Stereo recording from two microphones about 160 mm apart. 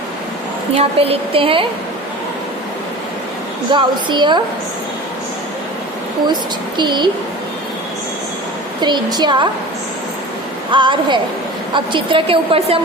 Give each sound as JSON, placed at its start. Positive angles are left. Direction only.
{"t": 0.7, "sound": "a woman's voice", "side_deg": -40}
{"t": 3.7, "sound": "speech", "side_deg": -30}
{"t": 6.2, "sound": "speech", "side_deg": -30}
{"t": 8.8, "sound": "speech", "side_deg": -25}
{"t": 10.7, "sound": "a woman's voice", "side_deg": -30}